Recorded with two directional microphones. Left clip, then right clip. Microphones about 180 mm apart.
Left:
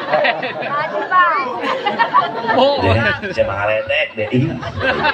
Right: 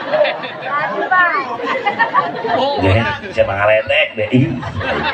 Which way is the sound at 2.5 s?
30° left (ahead or behind).